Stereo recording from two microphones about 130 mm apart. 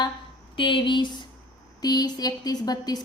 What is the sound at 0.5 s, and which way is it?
A woman's voice, 40° left (ahead or behind).